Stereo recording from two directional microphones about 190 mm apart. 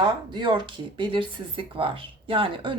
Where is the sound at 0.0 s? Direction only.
25° right (ahead or behind).